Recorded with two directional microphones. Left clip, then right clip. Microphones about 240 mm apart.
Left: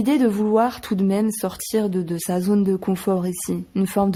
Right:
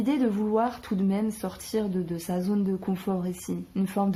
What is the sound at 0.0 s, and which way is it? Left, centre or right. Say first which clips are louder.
Speech: left 7 dB; left.